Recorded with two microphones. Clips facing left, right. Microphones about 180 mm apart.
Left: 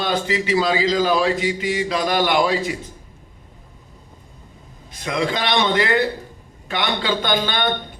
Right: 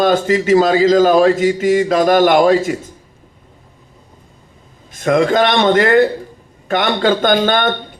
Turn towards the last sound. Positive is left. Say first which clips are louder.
# right 7 dB
turn(degrees=-50)  # may be behind; listen again after turning